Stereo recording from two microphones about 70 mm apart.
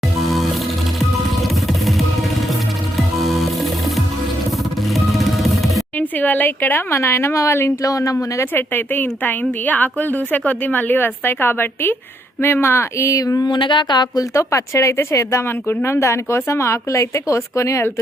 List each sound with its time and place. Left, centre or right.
0.2 s music: centre
3.2 s music: centre
4.9 s music: centre
6.0 s speech: left
7.8 s speech: left
8.1 s a woman's voice: left
13.1 s a sound: left
14.3 s speech: left